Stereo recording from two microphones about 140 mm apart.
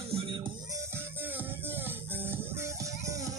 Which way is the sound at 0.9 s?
15° right (ahead or behind).